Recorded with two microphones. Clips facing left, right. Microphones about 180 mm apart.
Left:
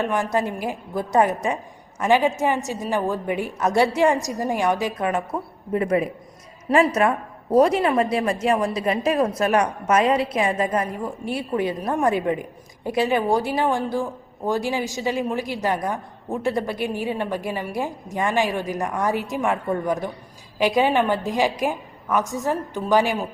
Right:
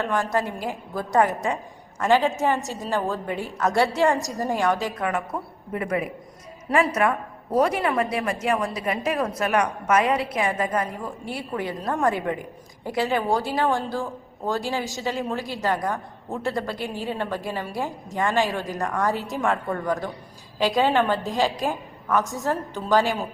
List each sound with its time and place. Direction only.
0.0 s a woman's voice: 15° left (ahead or behind)